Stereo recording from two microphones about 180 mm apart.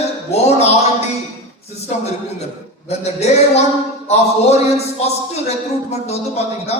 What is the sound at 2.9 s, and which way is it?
A man's voice, 35° left (ahead or behind).